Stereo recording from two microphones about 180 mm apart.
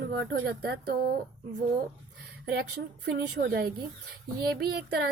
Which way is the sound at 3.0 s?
65° right (ahead or behind).